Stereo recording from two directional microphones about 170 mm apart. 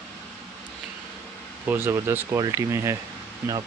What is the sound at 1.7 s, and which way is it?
Speech, 15° right (ahead or behind).